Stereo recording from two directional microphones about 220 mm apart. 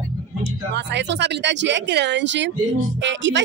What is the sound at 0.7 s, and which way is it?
Speech, 50° right (ahead or behind).